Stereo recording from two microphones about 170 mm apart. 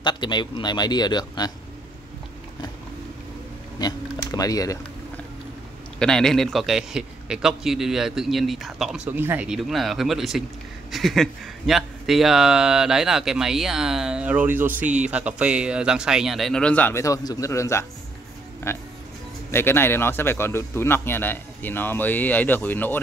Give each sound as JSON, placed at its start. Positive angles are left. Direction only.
{"t": 0.0, "sound": "speech", "side_deg": 25}
{"t": 3.8, "sound": "speech", "side_deg": 20}
{"t": 5.9, "sound": "a man's voice", "side_deg": 5}